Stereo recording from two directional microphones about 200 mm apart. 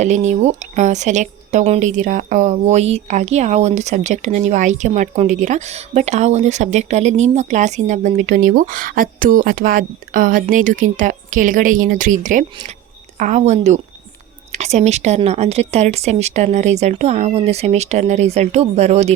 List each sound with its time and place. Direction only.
0.0 s speech: 35° right (ahead or behind)